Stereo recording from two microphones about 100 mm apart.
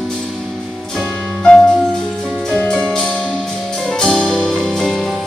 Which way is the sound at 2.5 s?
10° left (ahead or behind).